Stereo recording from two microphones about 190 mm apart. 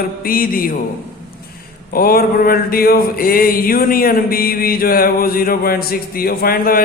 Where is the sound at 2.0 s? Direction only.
50° left (ahead or behind).